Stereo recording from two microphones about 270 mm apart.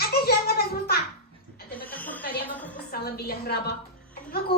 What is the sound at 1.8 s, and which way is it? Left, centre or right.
Music, centre.